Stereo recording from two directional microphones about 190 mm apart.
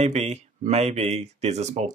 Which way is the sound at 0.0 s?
35° right (ahead or behind).